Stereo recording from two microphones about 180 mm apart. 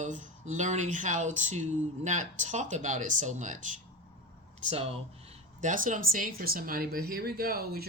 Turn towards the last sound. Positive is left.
turn(degrees=-60)  # may be behind; listen again after turning